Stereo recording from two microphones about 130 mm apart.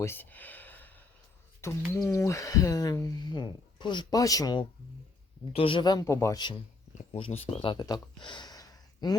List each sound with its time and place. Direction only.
0.0 s a sound: 15° left (ahead or behind)
1.6 s speech: 20° left (ahead or behind)
5.5 s speech: 40° left (ahead or behind)
7.0 s speech: 50° left (ahead or behind); by 9.1 s 30° left (ahead or behind)